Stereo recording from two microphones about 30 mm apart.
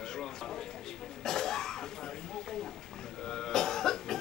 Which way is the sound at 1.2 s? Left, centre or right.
Centre.